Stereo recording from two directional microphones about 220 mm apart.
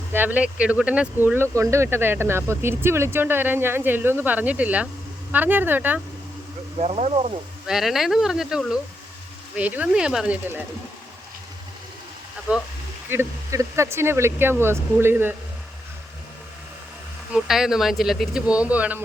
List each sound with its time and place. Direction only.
0.1 s speech: 10° right (ahead or behind)
6.7 s speech: 30° right (ahead or behind)
7.7 s speech: centre (ahead or behind)
12.5 s speech: 5° right (ahead or behind)
17.3 s speech: centre (ahead or behind)